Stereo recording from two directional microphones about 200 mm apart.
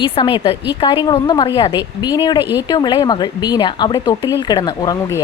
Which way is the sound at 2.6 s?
20° left (ahead or behind).